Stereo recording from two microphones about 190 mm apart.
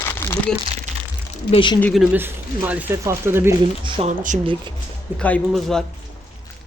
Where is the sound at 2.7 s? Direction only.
10° right (ahead or behind).